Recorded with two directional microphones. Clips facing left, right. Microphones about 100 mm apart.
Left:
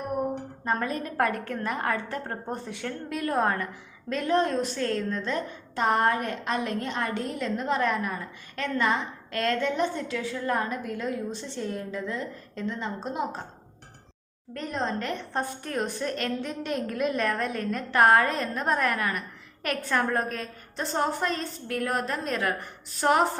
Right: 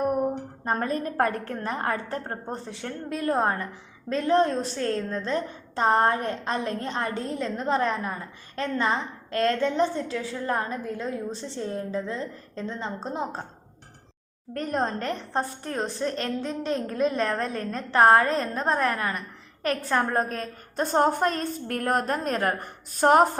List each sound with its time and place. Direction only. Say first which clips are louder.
0.6 s a woman's voice: right 2 dB; 40° right (ahead or behind)
14.5 s a woman's voice: right 3 dB; 45° right (ahead or behind)